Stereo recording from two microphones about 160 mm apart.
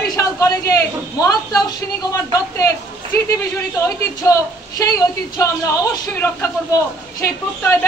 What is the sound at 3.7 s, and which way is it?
A man's voice, 20° left (ahead or behind).